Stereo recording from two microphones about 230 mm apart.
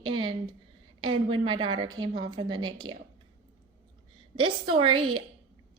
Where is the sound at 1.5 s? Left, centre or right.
Centre.